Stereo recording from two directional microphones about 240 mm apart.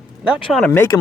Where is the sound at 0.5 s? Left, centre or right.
Centre.